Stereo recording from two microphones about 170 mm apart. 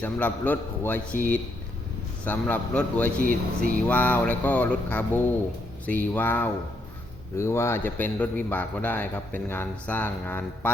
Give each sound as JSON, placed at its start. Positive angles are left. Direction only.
{"t": 0.0, "sound": "a man's voice", "side_deg": 10}
{"t": 2.2, "sound": "a man's voice", "side_deg": 10}
{"t": 3.2, "sound": "speech", "side_deg": -55}
{"t": 3.8, "sound": "a man's voice", "side_deg": 10}